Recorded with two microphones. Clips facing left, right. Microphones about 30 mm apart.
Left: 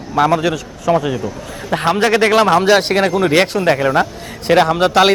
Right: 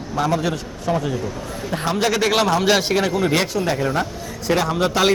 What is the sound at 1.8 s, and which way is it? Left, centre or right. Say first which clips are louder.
Speech: left 6 dB; left.